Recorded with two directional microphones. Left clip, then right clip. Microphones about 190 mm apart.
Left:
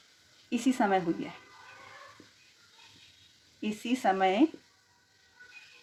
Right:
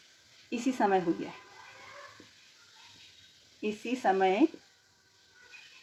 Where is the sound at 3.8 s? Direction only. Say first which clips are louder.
Left 1 dB; 55° left (ahead or behind).